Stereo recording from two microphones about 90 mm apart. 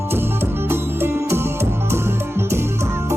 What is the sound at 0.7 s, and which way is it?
Music, 25° right (ahead or behind).